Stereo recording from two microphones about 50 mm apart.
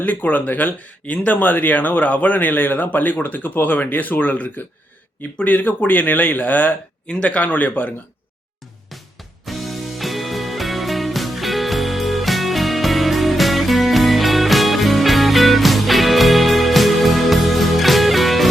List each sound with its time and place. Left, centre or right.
0.0 s speech: left
7.1 s speech: left
9.5 s music: centre